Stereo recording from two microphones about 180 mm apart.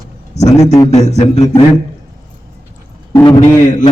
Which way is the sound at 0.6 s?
20° left (ahead or behind).